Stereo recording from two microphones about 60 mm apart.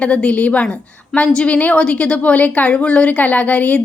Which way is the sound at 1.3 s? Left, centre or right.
Centre.